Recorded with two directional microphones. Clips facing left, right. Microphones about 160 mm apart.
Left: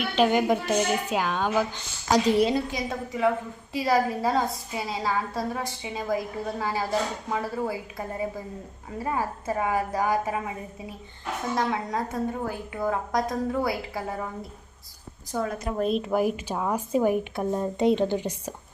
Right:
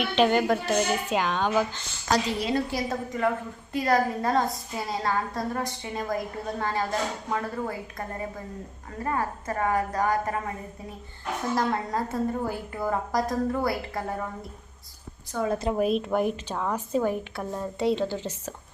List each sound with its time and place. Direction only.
0.2 s a woman's voice: 10° left (ahead or behind)
2.7 s a woman's voice: centre (ahead or behind)
11.5 s a woman's voice: centre (ahead or behind)
15.4 s a woman's voice: 25° right (ahead or behind)
15.8 s a woman's voice: centre (ahead or behind)